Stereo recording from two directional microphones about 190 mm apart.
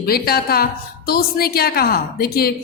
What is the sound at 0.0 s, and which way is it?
A woman's voice, 55° left (ahead or behind).